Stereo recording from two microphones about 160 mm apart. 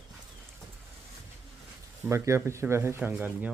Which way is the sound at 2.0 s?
15° right (ahead or behind).